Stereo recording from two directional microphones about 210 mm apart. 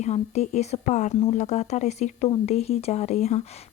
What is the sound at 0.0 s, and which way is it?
Speech, 30° left (ahead or behind).